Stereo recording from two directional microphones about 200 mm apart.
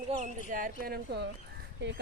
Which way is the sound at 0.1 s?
40° right (ahead or behind).